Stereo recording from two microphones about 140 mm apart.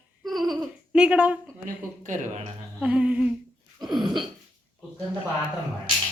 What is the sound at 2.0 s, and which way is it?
Speech, 65° right (ahead or behind).